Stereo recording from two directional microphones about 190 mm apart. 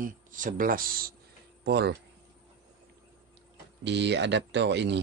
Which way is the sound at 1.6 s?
60° right (ahead or behind).